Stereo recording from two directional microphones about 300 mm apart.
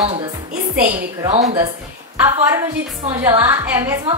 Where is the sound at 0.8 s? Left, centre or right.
Right.